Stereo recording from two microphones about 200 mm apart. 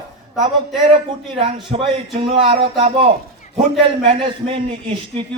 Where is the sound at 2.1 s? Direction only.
30° right (ahead or behind).